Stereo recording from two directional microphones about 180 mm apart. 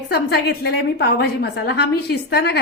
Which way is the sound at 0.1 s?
65° left (ahead or behind).